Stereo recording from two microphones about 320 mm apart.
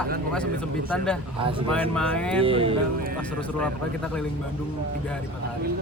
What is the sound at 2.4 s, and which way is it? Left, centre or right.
Speech, centre.